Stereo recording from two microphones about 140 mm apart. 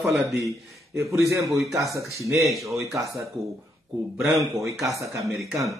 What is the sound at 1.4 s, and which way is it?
Speech, centre (ahead or behind).